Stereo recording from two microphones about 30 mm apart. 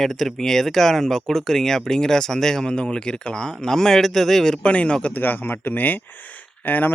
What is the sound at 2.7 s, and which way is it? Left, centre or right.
Speech, left.